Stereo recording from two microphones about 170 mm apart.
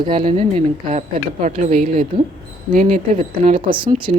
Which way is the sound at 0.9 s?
50° right (ahead or behind).